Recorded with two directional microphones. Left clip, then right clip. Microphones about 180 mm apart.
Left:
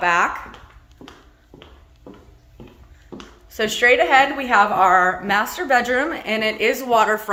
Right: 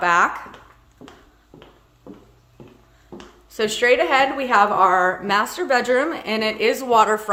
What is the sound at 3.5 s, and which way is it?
A woman's voice, 15° right (ahead or behind).